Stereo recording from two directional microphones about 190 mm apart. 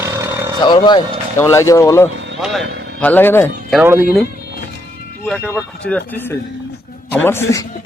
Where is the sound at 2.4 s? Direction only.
Centre (ahead or behind).